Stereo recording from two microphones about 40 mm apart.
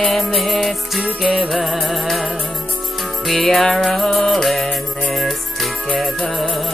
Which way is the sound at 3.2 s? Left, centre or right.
Centre.